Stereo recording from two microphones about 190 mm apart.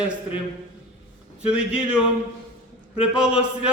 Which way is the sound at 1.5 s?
5° right (ahead or behind).